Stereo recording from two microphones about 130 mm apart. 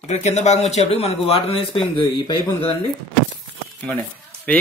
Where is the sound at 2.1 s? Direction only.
35° left (ahead or behind).